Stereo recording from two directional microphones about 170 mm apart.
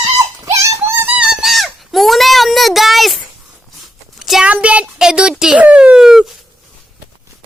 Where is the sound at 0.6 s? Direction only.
15° right (ahead or behind).